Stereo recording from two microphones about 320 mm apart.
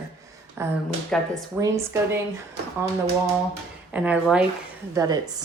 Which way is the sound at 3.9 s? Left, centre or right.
Centre.